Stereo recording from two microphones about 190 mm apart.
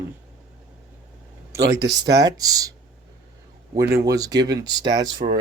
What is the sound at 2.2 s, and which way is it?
Speech, 20° right (ahead or behind).